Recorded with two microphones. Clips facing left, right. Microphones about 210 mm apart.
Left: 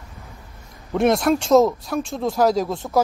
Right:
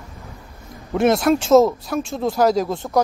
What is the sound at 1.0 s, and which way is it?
Speech, centre (ahead or behind).